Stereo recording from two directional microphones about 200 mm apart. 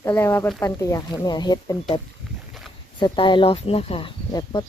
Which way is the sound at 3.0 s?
25° left (ahead or behind).